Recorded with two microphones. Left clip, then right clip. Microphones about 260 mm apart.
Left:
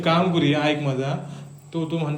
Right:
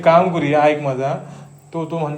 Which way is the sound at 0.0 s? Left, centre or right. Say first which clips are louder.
Right 7 dB; centre.